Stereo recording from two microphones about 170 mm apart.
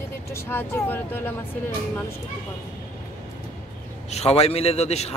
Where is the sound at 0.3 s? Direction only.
15° left (ahead or behind).